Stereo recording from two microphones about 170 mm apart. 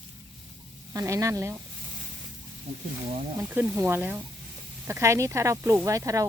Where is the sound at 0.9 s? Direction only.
20° right (ahead or behind).